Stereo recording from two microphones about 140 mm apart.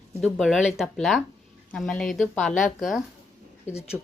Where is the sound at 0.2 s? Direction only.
Centre (ahead or behind).